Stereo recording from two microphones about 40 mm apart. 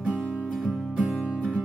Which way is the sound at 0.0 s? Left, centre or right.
Right.